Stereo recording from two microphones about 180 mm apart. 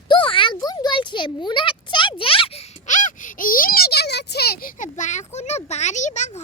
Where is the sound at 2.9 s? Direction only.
45° left (ahead or behind).